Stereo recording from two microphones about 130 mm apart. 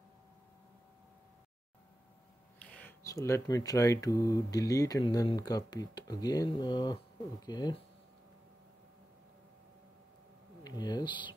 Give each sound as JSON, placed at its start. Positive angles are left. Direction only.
{"t": 2.6, "sound": "a sound", "side_deg": 10}
{"t": 3.0, "sound": "speech", "side_deg": 25}
{"t": 10.6, "sound": "speech", "side_deg": 30}